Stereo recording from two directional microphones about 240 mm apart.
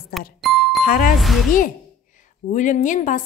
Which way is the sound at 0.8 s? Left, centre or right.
Left.